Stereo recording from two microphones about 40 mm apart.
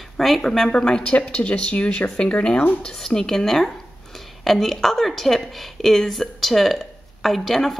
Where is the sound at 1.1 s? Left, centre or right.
Left.